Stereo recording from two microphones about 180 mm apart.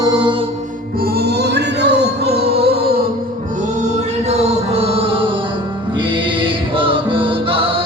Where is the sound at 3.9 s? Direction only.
35° right (ahead or behind).